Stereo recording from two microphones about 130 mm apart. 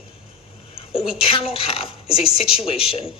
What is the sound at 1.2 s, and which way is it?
A woman's voice, 45° left (ahead or behind).